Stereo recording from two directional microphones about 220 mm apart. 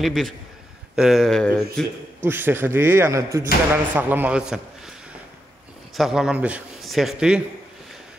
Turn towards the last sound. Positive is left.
turn(degrees=-5)  # may be behind; listen again after turning